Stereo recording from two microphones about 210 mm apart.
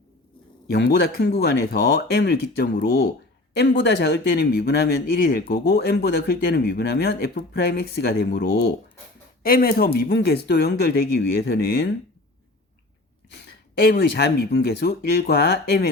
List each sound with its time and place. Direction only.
0.7 s speech: 50° left (ahead or behind)
13.9 s speech: 50° left (ahead or behind)